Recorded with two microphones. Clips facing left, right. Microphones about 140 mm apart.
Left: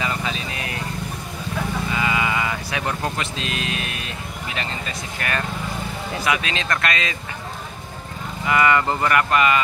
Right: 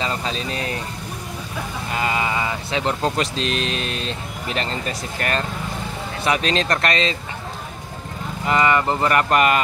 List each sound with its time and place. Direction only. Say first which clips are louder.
0.0 s vehicle: right 1 dB; 30° right (ahead or behind)
1.9 s a sound: right 3 dB; 45° right (ahead or behind); by 3.1 s 20° right (ahead or behind)
3.2 s speech: right 5 dB; 35° right (ahead or behind)
8.5 s speech: even; 25° right (ahead or behind)
9.1 s speech: right 1 dB; 45° right (ahead or behind)